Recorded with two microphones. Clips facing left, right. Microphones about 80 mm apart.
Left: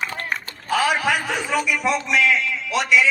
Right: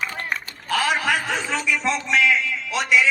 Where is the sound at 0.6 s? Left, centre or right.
Centre.